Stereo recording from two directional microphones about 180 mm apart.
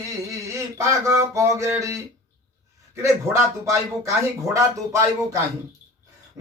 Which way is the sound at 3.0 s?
15° right (ahead or behind).